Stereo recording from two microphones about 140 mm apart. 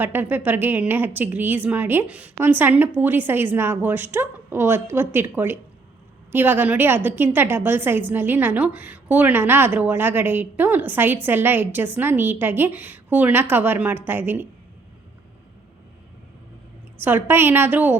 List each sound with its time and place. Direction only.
0.0 s a woman's voice: 15° right (ahead or behind)
17.0 s a woman's voice: 15° right (ahead or behind)